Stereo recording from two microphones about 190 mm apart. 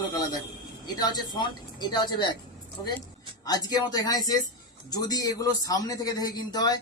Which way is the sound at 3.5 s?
20° left (ahead or behind).